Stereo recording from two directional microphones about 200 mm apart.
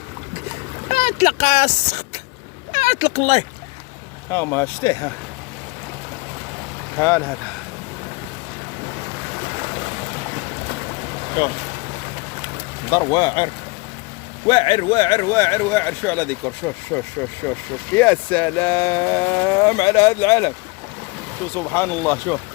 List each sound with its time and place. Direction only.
0.9 s speech: 35° left (ahead or behind)
4.3 s speech: 10° left (ahead or behind)
7.0 s speech: 10° left (ahead or behind)
12.9 s speech: 20° left (ahead or behind)
21.5 s speech: 10° left (ahead or behind)